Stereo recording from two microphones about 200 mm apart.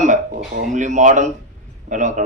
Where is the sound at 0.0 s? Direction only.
35° right (ahead or behind).